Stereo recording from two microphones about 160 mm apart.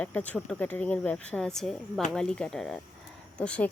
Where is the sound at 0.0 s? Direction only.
10° left (ahead or behind).